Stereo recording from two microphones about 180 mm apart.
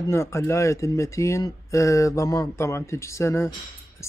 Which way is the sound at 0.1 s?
15° left (ahead or behind).